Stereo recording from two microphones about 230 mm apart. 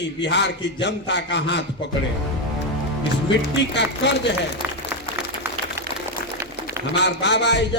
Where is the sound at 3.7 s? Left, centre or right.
Left.